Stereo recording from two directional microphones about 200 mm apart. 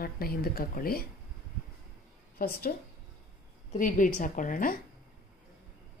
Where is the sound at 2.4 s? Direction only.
45° left (ahead or behind).